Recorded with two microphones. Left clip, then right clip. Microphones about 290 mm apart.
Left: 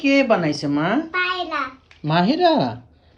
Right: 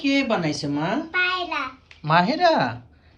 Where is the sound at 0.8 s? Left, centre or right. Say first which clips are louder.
Left 4 dB; left.